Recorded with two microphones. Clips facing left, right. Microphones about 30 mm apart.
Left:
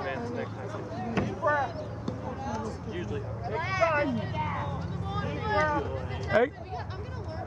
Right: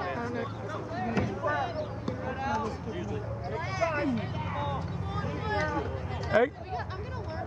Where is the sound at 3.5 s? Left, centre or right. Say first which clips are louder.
Left 4 dB; left.